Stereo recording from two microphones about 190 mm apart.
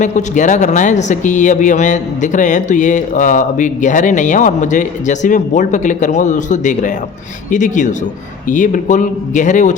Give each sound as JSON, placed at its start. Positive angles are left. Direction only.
{"t": 0.0, "sound": "speech", "side_deg": 40}